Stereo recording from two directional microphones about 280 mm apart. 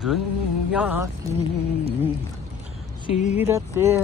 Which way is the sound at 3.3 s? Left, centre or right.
Centre.